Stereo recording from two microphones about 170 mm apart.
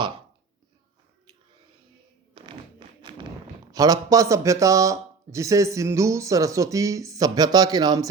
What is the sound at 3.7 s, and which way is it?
Speech, 20° right (ahead or behind).